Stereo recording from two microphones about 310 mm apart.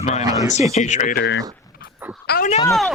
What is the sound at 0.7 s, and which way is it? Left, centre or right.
Speech, left.